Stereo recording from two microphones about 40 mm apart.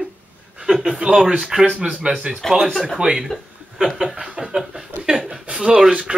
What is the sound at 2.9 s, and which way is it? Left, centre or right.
Speech, centre.